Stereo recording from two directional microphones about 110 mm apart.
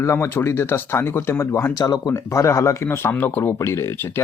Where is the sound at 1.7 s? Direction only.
35° left (ahead or behind).